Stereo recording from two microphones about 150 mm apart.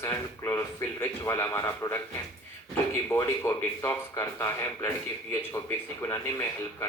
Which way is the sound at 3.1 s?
15° left (ahead or behind).